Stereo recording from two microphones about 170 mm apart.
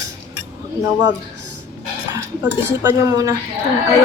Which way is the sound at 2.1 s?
15° right (ahead or behind).